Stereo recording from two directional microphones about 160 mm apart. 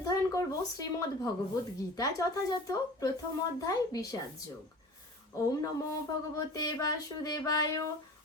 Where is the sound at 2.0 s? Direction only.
20° left (ahead or behind).